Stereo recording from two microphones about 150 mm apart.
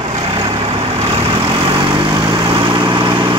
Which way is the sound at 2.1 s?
25° right (ahead or behind).